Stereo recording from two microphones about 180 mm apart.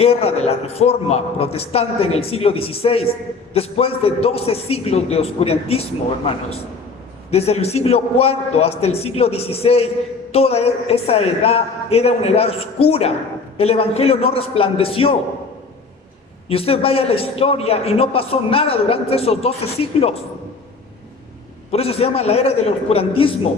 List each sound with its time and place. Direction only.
0.0 s a man's voice: 35° left (ahead or behind)
7.3 s a man's voice: 35° left (ahead or behind)
16.5 s a man's voice: 30° left (ahead or behind)
21.7 s a man's voice: 35° left (ahead or behind)